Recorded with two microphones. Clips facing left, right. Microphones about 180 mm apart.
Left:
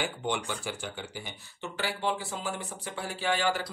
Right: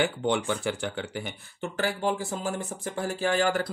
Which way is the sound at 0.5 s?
60° right (ahead or behind).